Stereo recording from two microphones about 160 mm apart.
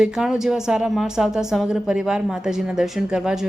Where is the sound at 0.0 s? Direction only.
5° right (ahead or behind).